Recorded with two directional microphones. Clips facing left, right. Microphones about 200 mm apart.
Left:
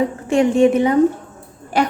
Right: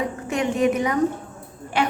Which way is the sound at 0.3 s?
30° left (ahead or behind).